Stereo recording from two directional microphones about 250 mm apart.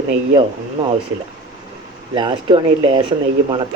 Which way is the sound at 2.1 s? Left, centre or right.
Centre.